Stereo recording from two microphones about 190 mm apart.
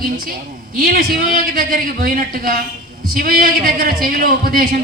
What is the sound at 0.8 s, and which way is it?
A man's voice, 50° right (ahead or behind).